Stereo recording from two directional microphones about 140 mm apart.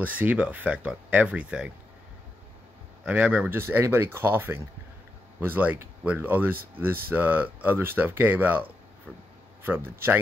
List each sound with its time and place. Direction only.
0.0 s speech: 10° right (ahead or behind)
3.1 s speech: 10° right (ahead or behind)